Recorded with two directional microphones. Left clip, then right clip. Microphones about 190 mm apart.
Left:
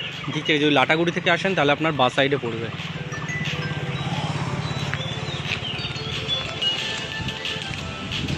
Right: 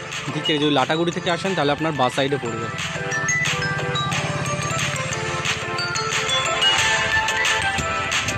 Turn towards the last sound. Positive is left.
turn(degrees=-85)